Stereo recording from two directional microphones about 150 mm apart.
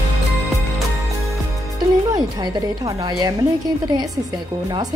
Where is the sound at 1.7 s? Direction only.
30° right (ahead or behind).